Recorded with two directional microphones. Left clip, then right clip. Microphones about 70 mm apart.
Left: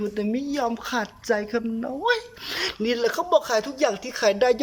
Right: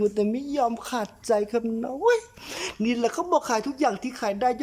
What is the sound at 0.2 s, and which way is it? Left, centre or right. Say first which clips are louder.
A woman's voice: right 1 dB; right.